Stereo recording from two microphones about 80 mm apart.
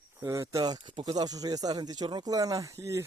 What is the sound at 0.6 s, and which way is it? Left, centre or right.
Speech, right.